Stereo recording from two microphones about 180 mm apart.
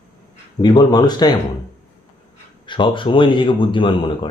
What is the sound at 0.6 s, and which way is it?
Speech, 25° left (ahead or behind).